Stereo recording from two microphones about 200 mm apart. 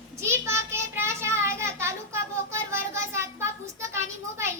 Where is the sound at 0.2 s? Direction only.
15° right (ahead or behind).